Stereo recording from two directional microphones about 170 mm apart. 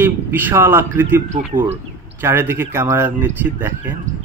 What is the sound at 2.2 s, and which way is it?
Speech, 15° right (ahead or behind).